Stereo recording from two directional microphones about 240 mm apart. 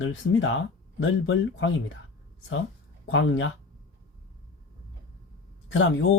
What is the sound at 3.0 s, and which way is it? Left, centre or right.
Speech, left.